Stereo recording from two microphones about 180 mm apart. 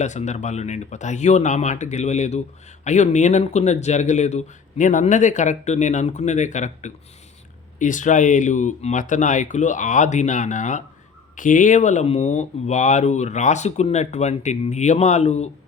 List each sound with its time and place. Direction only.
0.0 s speech: 40° left (ahead or behind)